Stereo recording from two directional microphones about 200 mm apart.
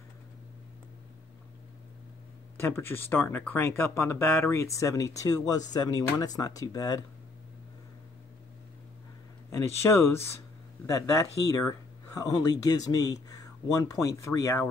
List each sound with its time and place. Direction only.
2.5 s speech: 10° left (ahead or behind)
9.5 s speech: 15° left (ahead or behind)
11.5 s speech: 15° left (ahead or behind)